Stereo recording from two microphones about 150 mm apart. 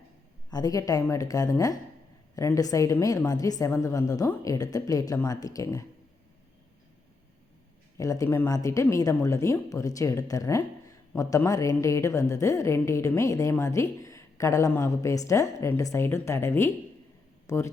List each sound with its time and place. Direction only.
0.5 s a woman's voice: 25° left (ahead or behind)
7.9 s a woman's voice: 20° left (ahead or behind)
17.4 s a sound: 15° left (ahead or behind)